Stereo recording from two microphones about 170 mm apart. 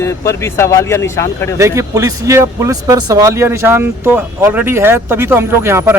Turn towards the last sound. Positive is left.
turn(degrees=-15)  # may be behind; listen again after turning